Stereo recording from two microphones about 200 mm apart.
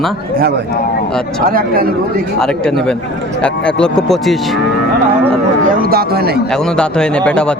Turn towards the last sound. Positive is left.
turn(degrees=5)  # may be behind; listen again after turning